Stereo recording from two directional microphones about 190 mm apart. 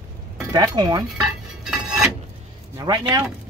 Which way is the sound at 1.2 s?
Centre (ahead or behind).